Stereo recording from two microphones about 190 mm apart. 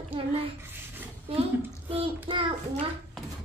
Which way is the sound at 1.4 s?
30° right (ahead or behind).